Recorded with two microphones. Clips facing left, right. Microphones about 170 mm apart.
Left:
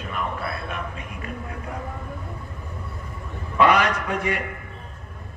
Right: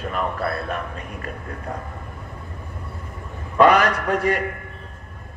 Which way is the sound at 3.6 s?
45° right (ahead or behind).